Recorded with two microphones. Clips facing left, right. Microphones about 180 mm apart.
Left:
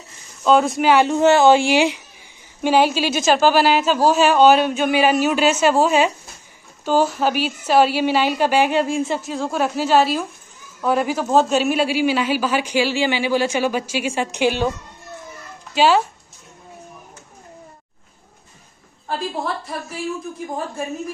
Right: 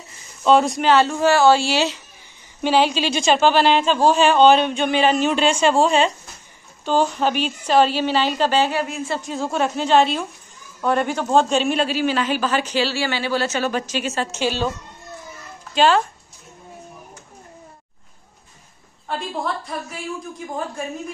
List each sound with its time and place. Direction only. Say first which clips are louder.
0.4 s a man's voice: even; centre (ahead or behind)
8.8 s a woman's voice: left 7 dB; 30° left (ahead or behind)
9.2 s a man's voice: left 1 dB; centre (ahead or behind)
15.7 s a man's voice: left 1 dB; 10° left (ahead or behind)
19.0 s speech: left 1 dB; centre (ahead or behind)